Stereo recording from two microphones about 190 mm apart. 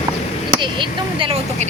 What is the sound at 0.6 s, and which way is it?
Speech, 25° right (ahead or behind).